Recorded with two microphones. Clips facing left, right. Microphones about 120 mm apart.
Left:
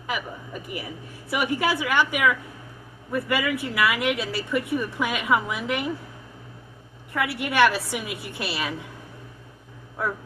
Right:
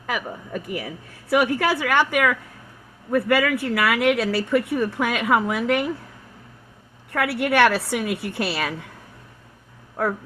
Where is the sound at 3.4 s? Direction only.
65° right (ahead or behind).